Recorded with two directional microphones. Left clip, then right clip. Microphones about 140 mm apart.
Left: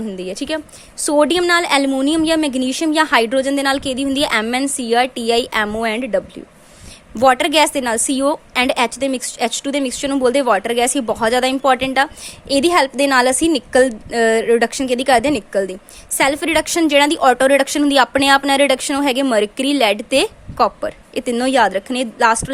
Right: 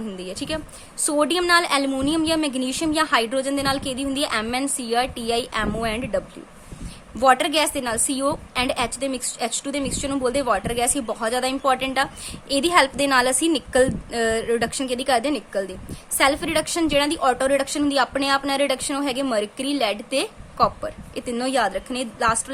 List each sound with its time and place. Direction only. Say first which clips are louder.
0.2 s a woman's voice: left 6 dB; 45° left (ahead or behind)
1.9 s a woman's voice: left 6 dB; 35° left (ahead or behind); by 22.4 s 50° left (ahead or behind)